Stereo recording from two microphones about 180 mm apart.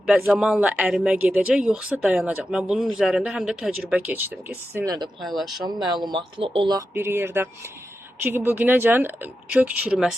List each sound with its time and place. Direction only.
0.3 s speech: 5° right (ahead or behind)
5.2 s speech: centre (ahead or behind)
5.6 s speech: 25° right (ahead or behind)
6.7 s speech: 15° right (ahead or behind)